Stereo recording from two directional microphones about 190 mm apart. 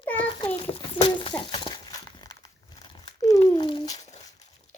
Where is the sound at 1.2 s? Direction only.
25° left (ahead or behind).